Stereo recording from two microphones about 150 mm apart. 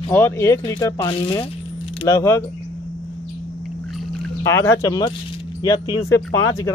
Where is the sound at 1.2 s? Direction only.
35° left (ahead or behind).